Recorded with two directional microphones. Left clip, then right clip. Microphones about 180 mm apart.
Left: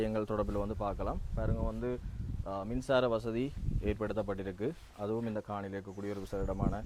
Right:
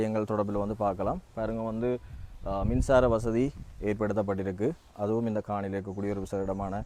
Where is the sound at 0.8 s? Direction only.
50° right (ahead or behind).